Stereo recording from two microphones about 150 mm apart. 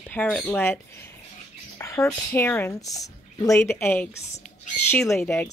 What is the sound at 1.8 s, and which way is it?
Speech, 20° left (ahead or behind).